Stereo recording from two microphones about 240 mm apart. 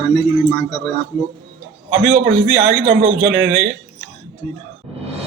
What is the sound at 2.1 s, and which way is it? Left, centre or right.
A man's voice, right.